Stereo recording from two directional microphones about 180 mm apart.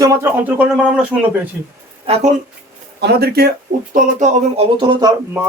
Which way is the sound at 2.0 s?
40° right (ahead or behind).